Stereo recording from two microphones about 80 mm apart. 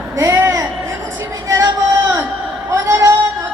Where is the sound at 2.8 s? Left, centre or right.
Right.